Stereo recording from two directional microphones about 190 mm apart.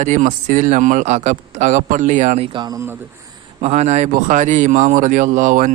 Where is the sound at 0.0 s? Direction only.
40° right (ahead or behind).